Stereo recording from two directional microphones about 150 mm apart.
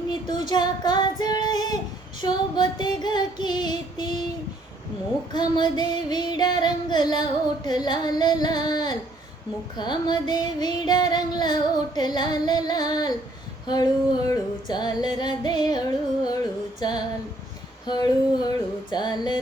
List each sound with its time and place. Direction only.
0.4 s child singing: 30° left (ahead or behind)
2.2 s female singing: 30° left (ahead or behind)
5.3 s female singing: 30° left (ahead or behind)